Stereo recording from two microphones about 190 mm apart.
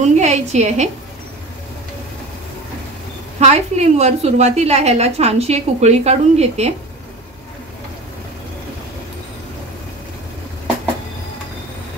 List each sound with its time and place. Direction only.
0.2 s a woman's voice: 35° right (ahead or behind)
3.3 s a woman's voice: 35° right (ahead or behind)